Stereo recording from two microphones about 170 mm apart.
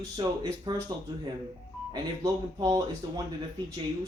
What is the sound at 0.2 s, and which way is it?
Speech, 25° right (ahead or behind).